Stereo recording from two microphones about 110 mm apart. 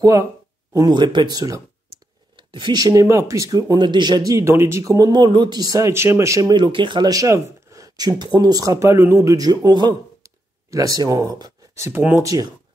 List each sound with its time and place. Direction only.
0.0 s speech: 30° right (ahead or behind)
0.7 s speech: 40° right (ahead or behind)
2.3 s speech: 45° right (ahead or behind); by 6.5 s 30° right (ahead or behind)
6.5 s speech: 45° right (ahead or behind)
11.8 s speech: 20° right (ahead or behind)